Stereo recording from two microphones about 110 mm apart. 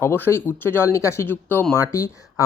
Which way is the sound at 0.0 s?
20° left (ahead or behind).